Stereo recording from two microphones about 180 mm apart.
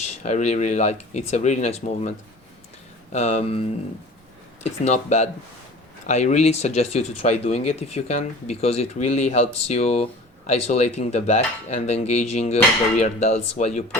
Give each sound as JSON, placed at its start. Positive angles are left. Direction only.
{"t": 0.2, "sound": "speech", "side_deg": 40}